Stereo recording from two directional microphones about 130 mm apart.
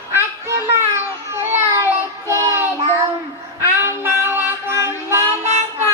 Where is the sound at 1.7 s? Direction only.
20° right (ahead or behind).